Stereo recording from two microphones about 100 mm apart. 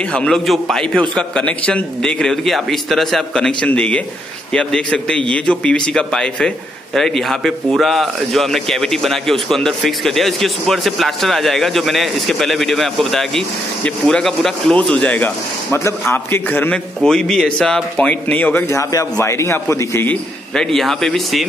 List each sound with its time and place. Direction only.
0.1 s a man's voice: 5° left (ahead or behind)
17.0 s a man's voice: 5° left (ahead or behind); by 20.1 s 30° left (ahead or behind)
20.5 s speech: 5° left (ahead or behind)